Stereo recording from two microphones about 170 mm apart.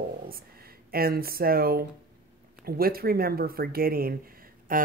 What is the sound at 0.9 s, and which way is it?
Speech, 60° right (ahead or behind).